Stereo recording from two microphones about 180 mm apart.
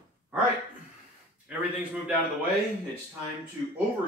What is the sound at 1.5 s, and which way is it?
Speech, 5° right (ahead or behind).